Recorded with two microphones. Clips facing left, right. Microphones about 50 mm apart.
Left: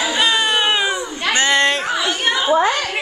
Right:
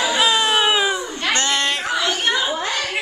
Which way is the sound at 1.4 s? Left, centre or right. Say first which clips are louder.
Left 7 dB; left.